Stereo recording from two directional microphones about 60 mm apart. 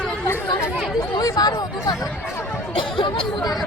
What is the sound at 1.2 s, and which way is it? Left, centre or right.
Speech, left.